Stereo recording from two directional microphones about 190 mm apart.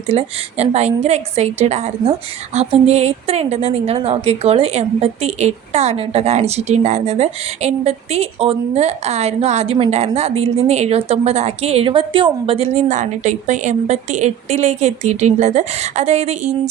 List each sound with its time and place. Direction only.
0.1 s a woman's voice: 35° right (ahead or behind)